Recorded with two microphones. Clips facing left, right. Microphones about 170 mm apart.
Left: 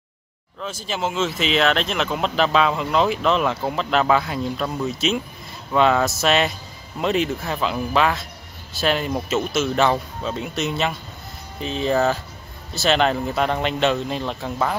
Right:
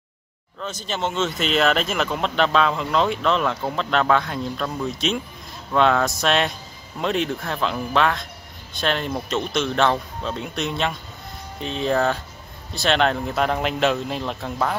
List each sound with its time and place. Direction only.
0.6 s speech: 5° left (ahead or behind)